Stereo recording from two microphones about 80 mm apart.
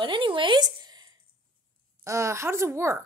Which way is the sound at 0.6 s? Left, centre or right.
Right.